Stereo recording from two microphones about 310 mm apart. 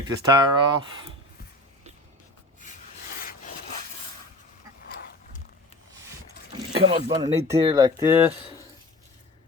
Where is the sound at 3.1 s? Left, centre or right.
Left.